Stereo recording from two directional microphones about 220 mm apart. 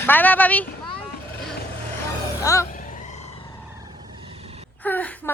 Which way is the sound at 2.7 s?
35° left (ahead or behind).